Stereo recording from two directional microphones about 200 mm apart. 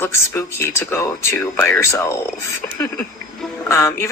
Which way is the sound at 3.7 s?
15° left (ahead or behind).